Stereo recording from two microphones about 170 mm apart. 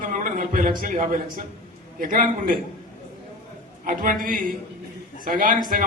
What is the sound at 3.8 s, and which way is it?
A man's voice, 55° right (ahead or behind).